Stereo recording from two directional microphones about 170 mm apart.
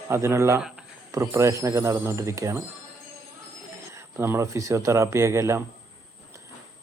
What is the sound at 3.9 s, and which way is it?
Speech, 15° right (ahead or behind).